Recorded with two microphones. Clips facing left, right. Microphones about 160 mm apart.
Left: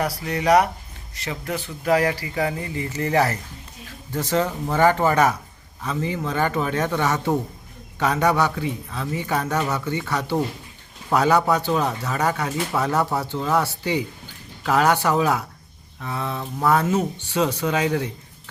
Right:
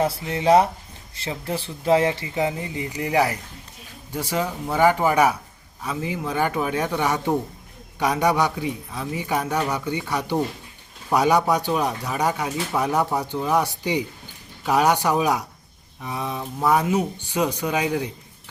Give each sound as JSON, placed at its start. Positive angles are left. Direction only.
{"t": 0.0, "sound": "speech", "side_deg": -25}